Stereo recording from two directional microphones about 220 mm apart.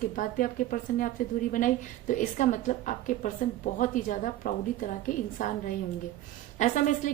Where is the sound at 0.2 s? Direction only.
40° left (ahead or behind).